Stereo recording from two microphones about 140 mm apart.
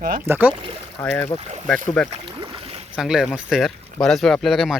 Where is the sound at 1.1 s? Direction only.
15° left (ahead or behind).